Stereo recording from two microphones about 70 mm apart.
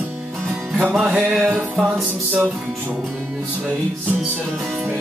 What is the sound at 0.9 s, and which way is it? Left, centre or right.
Music, centre.